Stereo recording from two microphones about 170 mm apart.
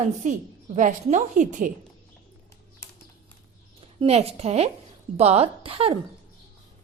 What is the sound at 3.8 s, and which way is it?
A woman's voice, 35° right (ahead or behind).